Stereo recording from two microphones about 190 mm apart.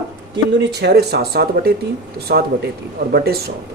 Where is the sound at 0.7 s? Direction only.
60° right (ahead or behind).